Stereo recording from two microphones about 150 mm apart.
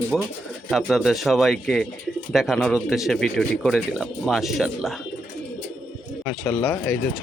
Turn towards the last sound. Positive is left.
turn(degrees=15)  # may be behind; listen again after turning